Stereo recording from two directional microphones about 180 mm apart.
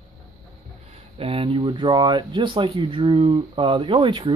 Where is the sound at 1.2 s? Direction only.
30° right (ahead or behind).